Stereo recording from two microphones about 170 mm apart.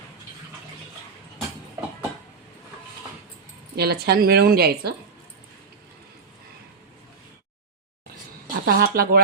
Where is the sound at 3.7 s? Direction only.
65° right (ahead or behind).